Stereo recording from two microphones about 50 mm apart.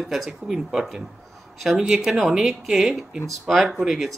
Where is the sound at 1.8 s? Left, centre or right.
Centre.